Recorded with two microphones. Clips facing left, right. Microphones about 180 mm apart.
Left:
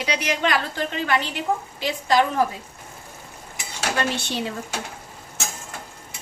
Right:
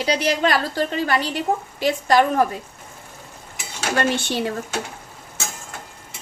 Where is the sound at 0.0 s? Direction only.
35° right (ahead or behind).